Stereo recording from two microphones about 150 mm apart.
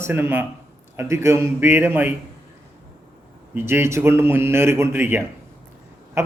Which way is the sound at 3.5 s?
15° right (ahead or behind).